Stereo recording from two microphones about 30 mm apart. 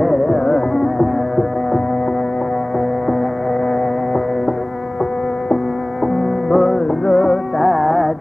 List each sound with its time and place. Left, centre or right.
0.0 s music: centre
6.5 s music: centre